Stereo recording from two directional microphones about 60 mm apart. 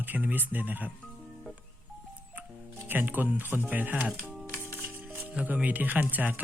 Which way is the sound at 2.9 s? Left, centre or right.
Right.